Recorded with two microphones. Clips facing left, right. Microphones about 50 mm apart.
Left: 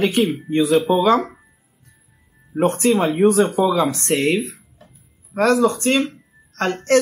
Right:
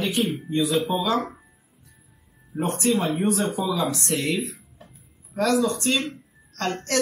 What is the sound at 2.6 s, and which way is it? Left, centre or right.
Speech, left.